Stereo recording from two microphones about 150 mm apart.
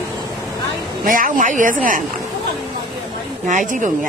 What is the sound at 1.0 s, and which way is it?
Speech, 65° right (ahead or behind).